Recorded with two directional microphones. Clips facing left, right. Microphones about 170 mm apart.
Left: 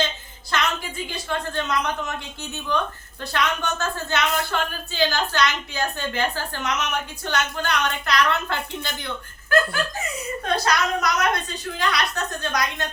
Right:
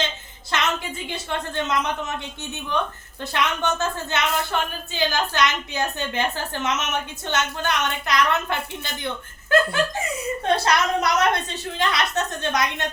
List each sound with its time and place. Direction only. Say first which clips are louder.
0.5 s music: even; 20° right (ahead or behind)
1.0 s speech: left 2 dB; 20° right (ahead or behind)
10.4 s speech: right 2 dB; 25° right (ahead or behind)